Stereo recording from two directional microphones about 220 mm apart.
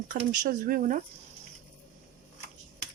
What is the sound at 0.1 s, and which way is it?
Speech, 40° right (ahead or behind).